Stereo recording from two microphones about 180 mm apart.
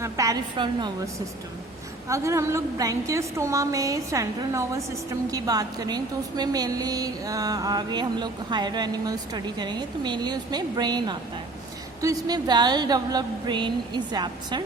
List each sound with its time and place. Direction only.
0.0 s a woman's voice: 20° right (ahead or behind)
2.0 s a woman's voice: 15° right (ahead or behind)